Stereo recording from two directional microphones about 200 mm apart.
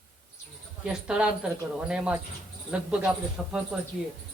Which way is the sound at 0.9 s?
5° right (ahead or behind).